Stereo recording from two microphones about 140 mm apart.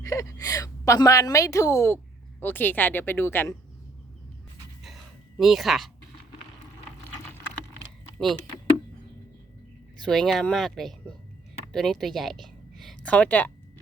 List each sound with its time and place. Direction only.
0.0 s a woman's voice: 20° left (ahead or behind)
5.4 s speech: centre (ahead or behind)
10.0 s a woman's voice: 5° left (ahead or behind)